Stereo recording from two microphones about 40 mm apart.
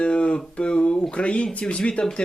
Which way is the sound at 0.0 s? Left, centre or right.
Left.